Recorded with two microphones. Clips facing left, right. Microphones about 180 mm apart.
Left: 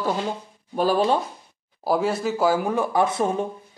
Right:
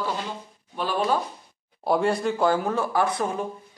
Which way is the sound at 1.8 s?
Centre (ahead or behind).